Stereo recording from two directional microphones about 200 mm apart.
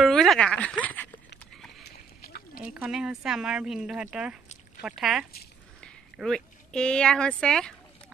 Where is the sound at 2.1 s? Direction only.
50° left (ahead or behind).